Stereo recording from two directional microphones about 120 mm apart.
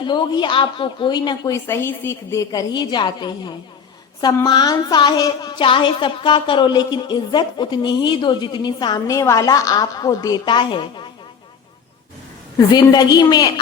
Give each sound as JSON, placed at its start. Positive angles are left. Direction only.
{"t": 0.0, "sound": "a woman's voice", "side_deg": 40}
{"t": 1.5, "sound": "a woman's voice", "side_deg": 20}
{"t": 12.5, "sound": "a woman's voice", "side_deg": 30}